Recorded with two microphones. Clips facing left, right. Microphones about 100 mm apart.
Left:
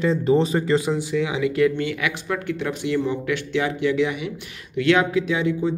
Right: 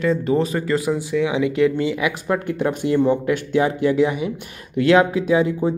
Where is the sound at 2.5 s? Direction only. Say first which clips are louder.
Right 3 dB; 40° right (ahead or behind).